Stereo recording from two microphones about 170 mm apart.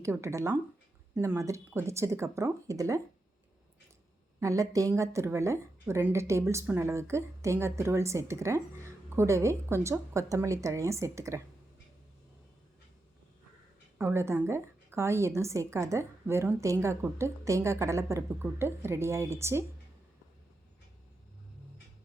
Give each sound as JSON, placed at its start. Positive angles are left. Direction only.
{"t": 0.0, "sound": "a woman's voice", "side_deg": -15}
{"t": 4.4, "sound": "a woman's voice", "side_deg": -20}
{"t": 14.0, "sound": "a woman's voice", "side_deg": -15}